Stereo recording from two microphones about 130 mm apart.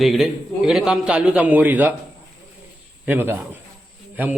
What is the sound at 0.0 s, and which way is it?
Speech, centre (ahead or behind).